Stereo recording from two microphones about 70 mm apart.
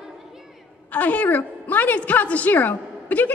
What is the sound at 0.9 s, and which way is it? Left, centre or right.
A woman's voice, left.